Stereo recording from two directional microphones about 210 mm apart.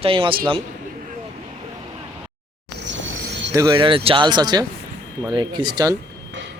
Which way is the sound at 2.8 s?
60° right (ahead or behind).